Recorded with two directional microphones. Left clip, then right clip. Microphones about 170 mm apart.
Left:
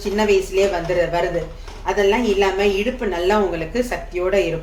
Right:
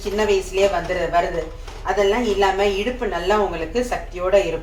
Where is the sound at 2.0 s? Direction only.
40° left (ahead or behind).